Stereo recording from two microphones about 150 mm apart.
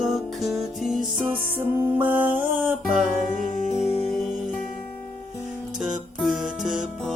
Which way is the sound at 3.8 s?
40° left (ahead or behind).